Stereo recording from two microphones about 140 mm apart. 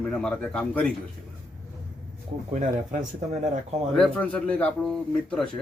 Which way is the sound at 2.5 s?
65° right (ahead or behind).